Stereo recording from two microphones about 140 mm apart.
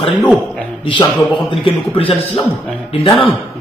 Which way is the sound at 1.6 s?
40° left (ahead or behind).